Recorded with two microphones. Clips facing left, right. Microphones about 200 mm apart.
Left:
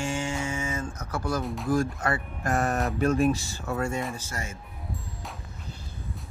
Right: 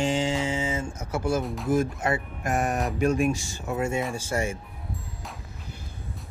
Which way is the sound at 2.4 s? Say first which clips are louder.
Even; 15° right (ahead or behind).